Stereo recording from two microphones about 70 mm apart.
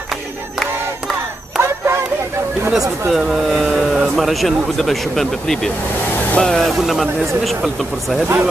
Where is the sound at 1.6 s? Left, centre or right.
Right.